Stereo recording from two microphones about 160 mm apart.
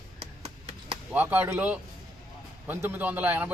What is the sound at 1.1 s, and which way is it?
A man's voice, 10° right (ahead or behind).